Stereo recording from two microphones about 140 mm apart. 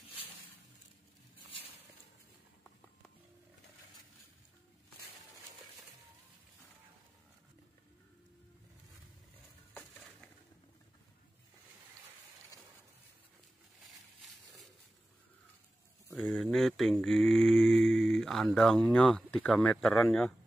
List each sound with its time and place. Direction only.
16.1 s speech: 5° left (ahead or behind)